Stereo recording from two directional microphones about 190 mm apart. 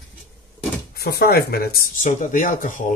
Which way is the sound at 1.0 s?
55° left (ahead or behind).